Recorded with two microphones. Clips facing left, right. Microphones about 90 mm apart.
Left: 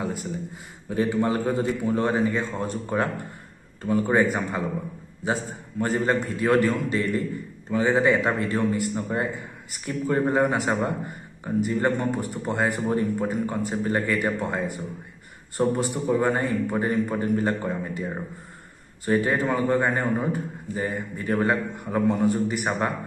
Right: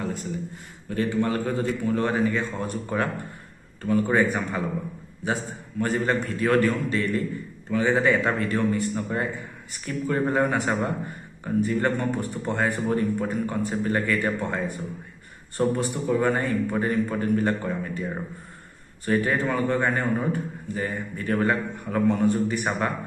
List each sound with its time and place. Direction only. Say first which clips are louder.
0.8 s speech: left 1 dB; 20° left (ahead or behind)
19.0 s speech: left 1 dB; 25° left (ahead or behind)